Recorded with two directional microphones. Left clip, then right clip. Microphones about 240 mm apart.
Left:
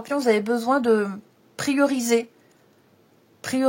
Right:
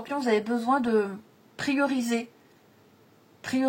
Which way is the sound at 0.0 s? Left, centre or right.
Left.